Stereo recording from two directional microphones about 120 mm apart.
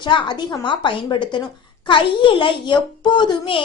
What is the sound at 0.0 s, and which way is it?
A woman's voice, 40° left (ahead or behind).